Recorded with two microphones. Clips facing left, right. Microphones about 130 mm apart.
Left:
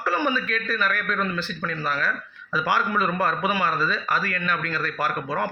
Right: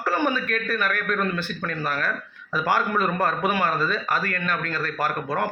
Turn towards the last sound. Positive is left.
turn(degrees=-45)  # may be behind; listen again after turning